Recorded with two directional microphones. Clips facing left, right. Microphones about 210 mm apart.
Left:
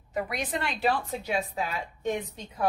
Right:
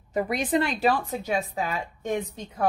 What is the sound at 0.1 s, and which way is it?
A woman's voice, 40° right (ahead or behind).